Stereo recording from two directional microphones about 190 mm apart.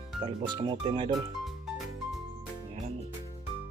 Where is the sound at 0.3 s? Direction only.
25° right (ahead or behind).